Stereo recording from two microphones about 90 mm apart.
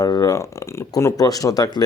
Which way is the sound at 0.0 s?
40° left (ahead or behind).